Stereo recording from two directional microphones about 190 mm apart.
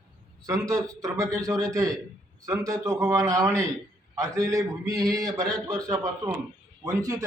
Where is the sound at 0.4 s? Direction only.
15° right (ahead or behind).